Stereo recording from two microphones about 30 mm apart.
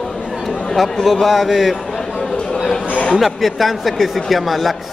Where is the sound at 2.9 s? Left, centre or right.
Left.